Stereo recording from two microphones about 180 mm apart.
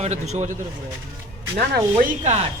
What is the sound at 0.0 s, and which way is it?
Speech, 40° right (ahead or behind).